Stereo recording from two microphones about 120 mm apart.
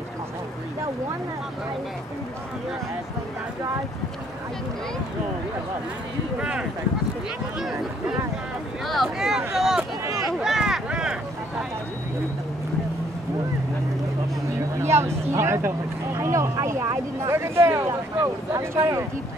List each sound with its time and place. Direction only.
8.8 s speech: centre (ahead or behind)
10.1 s a sound: centre (ahead or behind)
14.8 s speech: 20° right (ahead or behind)